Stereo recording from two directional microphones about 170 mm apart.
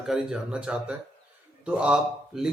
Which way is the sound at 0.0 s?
5° right (ahead or behind).